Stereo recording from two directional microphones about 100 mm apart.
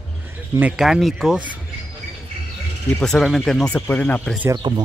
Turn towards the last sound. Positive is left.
turn(degrees=-45)  # may be behind; listen again after turning